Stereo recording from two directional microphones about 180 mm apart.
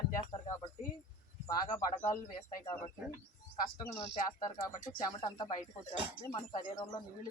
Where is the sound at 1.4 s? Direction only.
20° left (ahead or behind).